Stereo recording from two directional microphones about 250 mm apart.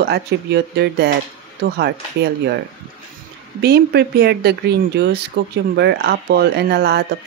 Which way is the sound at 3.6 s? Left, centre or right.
Right.